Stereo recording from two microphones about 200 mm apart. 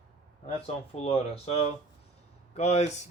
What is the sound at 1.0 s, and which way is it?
Speech, 30° left (ahead or behind).